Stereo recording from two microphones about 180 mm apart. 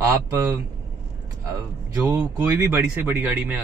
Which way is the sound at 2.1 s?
15° right (ahead or behind).